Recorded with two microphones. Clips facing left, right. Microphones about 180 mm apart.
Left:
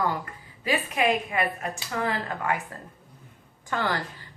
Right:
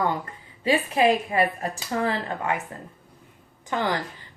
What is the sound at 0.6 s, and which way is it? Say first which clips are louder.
Speech: right 4 dB; 30° right (ahead or behind).